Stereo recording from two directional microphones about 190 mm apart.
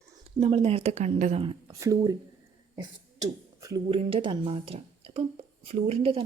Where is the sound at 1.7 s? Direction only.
15° right (ahead or behind).